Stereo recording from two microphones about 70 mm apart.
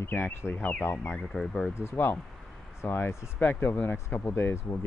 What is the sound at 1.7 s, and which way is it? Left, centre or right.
Speech, left.